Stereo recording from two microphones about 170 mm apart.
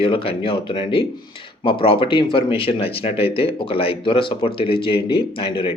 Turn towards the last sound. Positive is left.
turn(degrees=30)  # may be behind; listen again after turning